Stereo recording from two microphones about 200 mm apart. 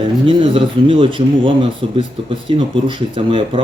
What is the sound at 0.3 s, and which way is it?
Speech, 25° right (ahead or behind).